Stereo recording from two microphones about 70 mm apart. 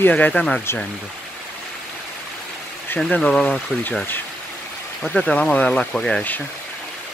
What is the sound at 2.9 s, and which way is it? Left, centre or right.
Speech, centre.